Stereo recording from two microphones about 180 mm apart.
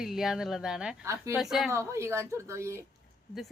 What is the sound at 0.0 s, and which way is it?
Speech, centre (ahead or behind).